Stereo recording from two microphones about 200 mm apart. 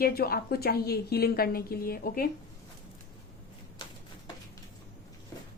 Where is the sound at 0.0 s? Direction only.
50° left (ahead or behind).